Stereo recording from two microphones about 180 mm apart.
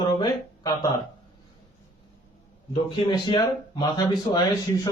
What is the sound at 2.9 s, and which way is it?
Speech, 25° left (ahead or behind).